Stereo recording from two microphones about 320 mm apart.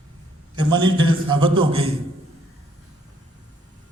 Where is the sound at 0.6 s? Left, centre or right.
Centre.